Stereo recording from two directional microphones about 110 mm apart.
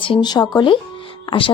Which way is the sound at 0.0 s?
45° left (ahead or behind).